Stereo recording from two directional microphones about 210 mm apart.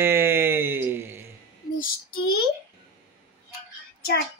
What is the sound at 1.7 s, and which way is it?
Female singing, 45° left (ahead or behind).